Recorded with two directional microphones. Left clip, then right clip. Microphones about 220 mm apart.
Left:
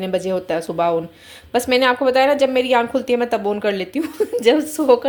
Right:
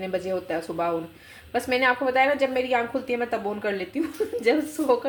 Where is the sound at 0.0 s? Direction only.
45° left (ahead or behind).